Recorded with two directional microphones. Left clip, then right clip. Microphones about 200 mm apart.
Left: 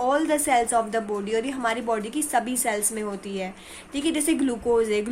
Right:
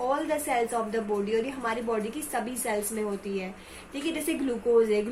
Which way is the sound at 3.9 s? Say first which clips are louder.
Left 6 dB; 50° left (ahead or behind).